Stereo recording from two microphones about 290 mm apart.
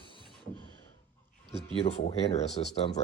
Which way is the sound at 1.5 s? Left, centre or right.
Left.